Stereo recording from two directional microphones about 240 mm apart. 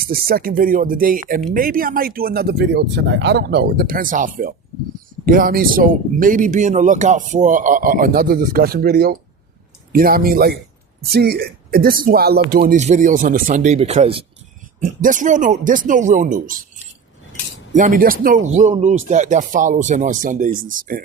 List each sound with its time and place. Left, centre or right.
0.0 s speech: right
17.7 s speech: right